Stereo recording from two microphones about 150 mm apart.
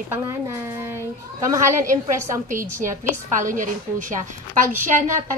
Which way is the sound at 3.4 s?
60° right (ahead or behind).